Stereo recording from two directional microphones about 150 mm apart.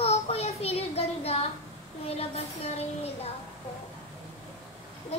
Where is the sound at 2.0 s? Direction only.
45° left (ahead or behind).